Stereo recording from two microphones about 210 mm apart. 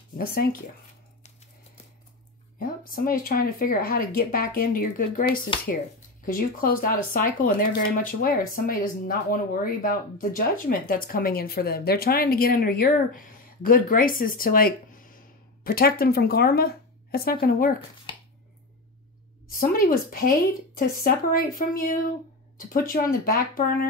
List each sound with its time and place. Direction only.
0.2 s speech: 45° left (ahead or behind)
2.6 s speech: 45° left (ahead or behind)
19.5 s speech: 40° left (ahead or behind)